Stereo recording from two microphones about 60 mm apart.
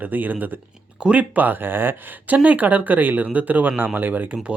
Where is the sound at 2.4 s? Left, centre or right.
Right.